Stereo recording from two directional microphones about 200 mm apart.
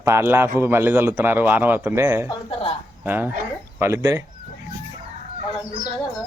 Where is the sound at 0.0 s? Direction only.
15° right (ahead or behind).